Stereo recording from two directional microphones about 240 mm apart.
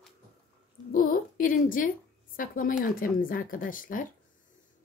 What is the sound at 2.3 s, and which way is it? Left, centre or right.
Speech, left.